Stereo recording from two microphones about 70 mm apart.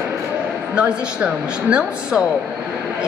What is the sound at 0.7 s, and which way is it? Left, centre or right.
A woman's voice, centre.